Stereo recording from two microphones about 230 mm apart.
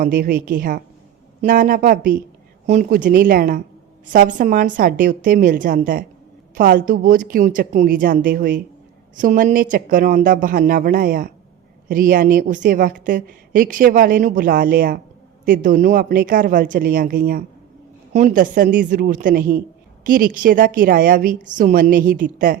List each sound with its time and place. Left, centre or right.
0.0 s a woman's voice: right